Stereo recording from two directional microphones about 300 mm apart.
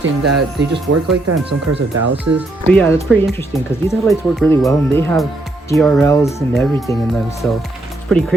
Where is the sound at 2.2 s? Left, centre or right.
Centre.